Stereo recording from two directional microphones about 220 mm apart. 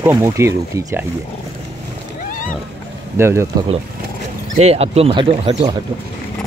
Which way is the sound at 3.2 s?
10° right (ahead or behind).